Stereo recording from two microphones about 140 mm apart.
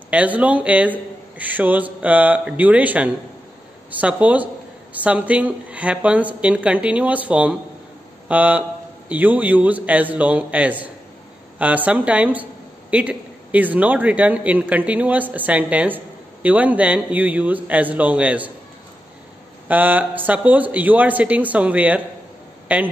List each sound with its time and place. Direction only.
0.1 s a man's voice: 10° right (ahead or behind)
19.7 s a man's voice: 10° right (ahead or behind)